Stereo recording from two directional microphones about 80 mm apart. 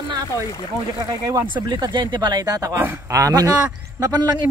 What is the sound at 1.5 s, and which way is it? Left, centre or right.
Speech, right.